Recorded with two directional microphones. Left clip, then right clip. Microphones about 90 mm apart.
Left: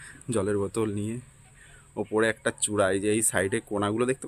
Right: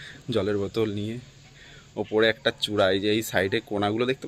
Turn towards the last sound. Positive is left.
turn(degrees=35)  # may be behind; listen again after turning